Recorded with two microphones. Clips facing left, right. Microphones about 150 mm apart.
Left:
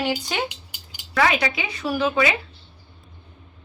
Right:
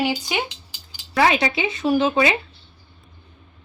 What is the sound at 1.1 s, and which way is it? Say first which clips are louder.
A woman's voice: right 2 dB; 30° right (ahead or behind).